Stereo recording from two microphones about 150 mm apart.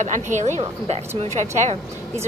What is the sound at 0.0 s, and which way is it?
Speech, 55° right (ahead or behind).